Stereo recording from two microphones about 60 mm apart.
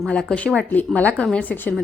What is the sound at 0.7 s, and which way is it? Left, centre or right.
A woman's voice, left.